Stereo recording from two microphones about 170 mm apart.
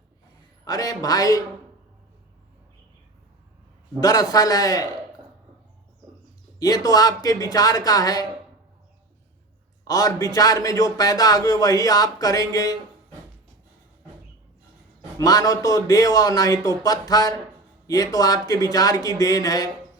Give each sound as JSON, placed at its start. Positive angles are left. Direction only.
{"t": 0.6, "sound": "speech", "side_deg": 20}
{"t": 4.0, "sound": "speech", "side_deg": 20}
{"t": 6.6, "sound": "speech", "side_deg": 20}
{"t": 9.8, "sound": "a man's voice", "side_deg": 20}
{"t": 15.2, "sound": "speech", "side_deg": 20}